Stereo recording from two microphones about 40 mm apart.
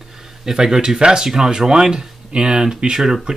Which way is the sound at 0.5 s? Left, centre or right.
Centre.